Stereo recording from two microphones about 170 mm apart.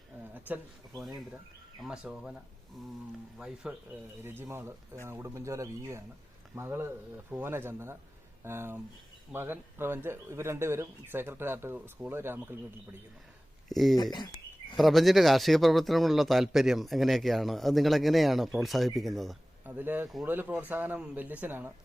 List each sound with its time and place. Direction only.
0.3 s a sound: 10° right (ahead or behind)
0.9 s a man's voice: centre (ahead or behind)
3.3 s a man's voice: 5° right (ahead or behind)
13.7 s speech: centre (ahead or behind)
13.9 s speech: 25° left (ahead or behind)
14.8 s a man's voice: centre (ahead or behind)
19.6 s speech: 10° right (ahead or behind)